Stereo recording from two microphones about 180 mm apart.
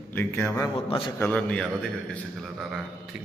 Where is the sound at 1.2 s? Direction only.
5° left (ahead or behind).